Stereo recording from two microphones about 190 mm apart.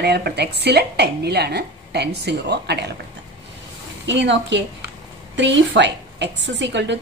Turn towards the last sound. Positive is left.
turn(degrees=-70)  # may be behind; listen again after turning